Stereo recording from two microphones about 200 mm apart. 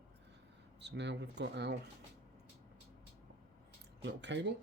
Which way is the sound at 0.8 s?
60° right (ahead or behind).